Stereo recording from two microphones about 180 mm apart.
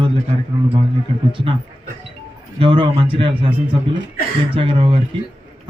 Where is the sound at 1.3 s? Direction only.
30° right (ahead or behind).